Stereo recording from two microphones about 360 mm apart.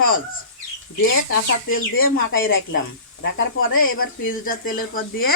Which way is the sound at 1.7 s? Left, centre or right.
Left.